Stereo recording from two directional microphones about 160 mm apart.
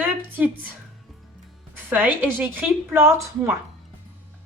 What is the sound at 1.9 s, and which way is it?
Speech, 10° right (ahead or behind).